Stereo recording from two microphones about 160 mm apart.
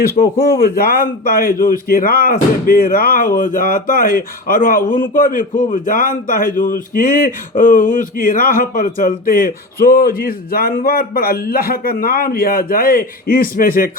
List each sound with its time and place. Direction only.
0.4 s speech: 70° left (ahead or behind)